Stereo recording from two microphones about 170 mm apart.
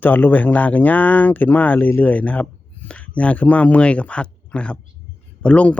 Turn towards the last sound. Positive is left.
turn(degrees=5)  # may be behind; listen again after turning